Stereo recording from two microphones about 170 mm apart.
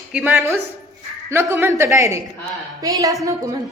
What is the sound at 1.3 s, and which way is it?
A woman's voice, 15° right (ahead or behind).